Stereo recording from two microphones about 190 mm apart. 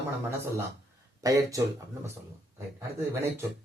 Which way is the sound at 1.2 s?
15° right (ahead or behind).